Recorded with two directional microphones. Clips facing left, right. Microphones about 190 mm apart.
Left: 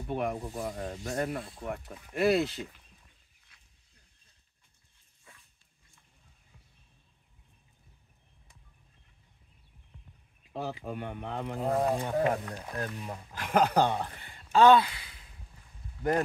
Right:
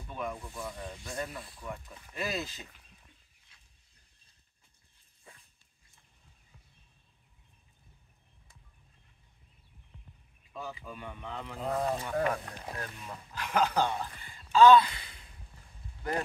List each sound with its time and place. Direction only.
0.1 s speech: 70° left (ahead or behind)
0.4 s speech: 40° left (ahead or behind)
1.1 s speech: 60° left (ahead or behind)
10.5 s speech: 70° left (ahead or behind); by 11.7 s 50° left (ahead or behind)
12.0 s speech: 25° left (ahead or behind)
12.7 s speech: 40° left (ahead or behind); by 14.8 s 60° left (ahead or behind)
14.8 s speech: 5° left (ahead or behind)